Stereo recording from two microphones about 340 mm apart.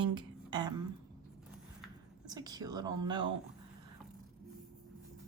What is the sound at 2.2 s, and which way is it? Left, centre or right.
A woman's voice, centre.